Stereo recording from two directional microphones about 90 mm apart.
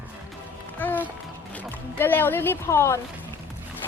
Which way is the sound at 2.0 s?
25° left (ahead or behind).